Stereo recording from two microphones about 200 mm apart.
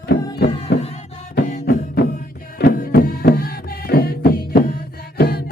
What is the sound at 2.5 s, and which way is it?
Music, 45° left (ahead or behind).